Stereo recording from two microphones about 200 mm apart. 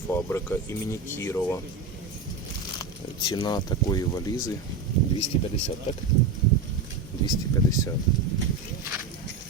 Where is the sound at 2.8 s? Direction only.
20° left (ahead or behind).